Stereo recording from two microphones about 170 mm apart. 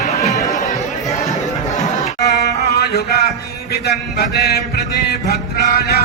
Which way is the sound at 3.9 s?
70° left (ahead or behind).